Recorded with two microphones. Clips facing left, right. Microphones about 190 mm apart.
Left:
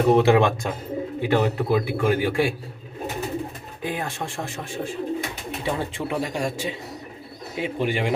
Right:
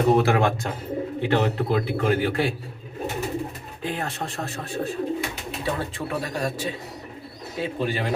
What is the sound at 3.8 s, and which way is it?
Speech, 15° left (ahead or behind).